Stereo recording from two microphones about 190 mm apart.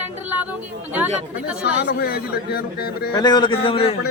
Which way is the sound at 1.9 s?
55° left (ahead or behind).